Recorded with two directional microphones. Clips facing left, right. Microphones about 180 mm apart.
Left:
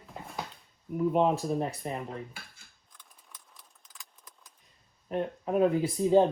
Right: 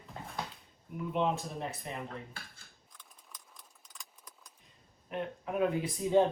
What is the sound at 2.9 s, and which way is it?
Keys jangling, centre (ahead or behind).